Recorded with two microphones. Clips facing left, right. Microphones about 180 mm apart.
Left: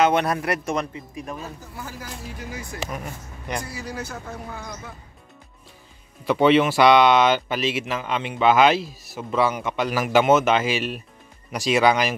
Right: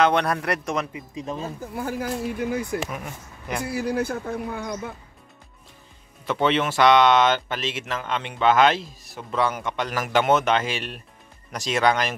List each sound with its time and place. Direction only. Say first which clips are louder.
0.0 s a man's voice: left 1 dB; 5° left (ahead or behind)
0.9 s speech: right 2 dB; 20° right (ahead or behind)
1.6 s speech: right 9 dB; 55° right (ahead or behind)
2.9 s a man's voice: left 1 dB; centre (ahead or behind)
3.6 s speech: right 8 dB; 60° right (ahead or behind)
6.2 s speech: left 5 dB; 10° left (ahead or behind)